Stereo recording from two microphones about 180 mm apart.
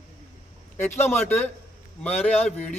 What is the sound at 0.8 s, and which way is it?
A man's voice, 10° left (ahead or behind).